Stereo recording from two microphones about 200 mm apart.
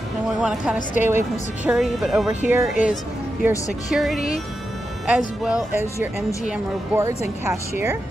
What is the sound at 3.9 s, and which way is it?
Speech, centre (ahead or behind).